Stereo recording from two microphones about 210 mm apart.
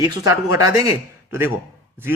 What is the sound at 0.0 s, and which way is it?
A man's voice, 15° right (ahead or behind).